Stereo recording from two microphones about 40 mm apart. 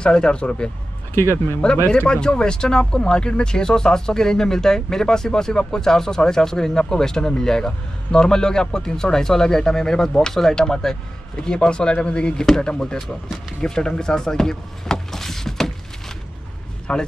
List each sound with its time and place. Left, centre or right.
0.0 s speech: left
1.2 s speech: left
1.6 s speech: left
12.4 s speech: centre
16.9 s speech: left